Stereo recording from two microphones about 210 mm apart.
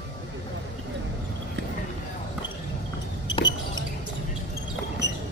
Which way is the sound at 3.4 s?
20° left (ahead or behind).